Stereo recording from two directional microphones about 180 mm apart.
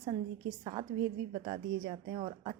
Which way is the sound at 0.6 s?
30° right (ahead or behind).